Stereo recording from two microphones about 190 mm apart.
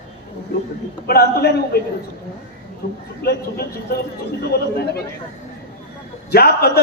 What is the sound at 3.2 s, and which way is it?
Speech, 55° left (ahead or behind).